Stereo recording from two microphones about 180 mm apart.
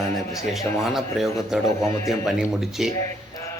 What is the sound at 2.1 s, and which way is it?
Speech, centre (ahead or behind).